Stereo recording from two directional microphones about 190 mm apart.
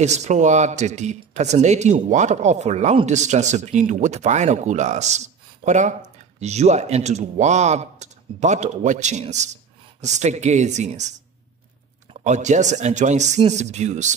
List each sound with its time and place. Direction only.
0.0 s speech: 35° right (ahead or behind)